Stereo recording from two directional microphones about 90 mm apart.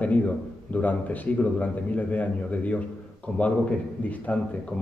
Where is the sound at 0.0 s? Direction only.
15° left (ahead or behind).